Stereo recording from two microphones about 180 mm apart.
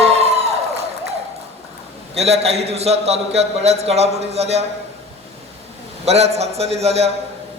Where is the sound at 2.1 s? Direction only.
35° right (ahead or behind).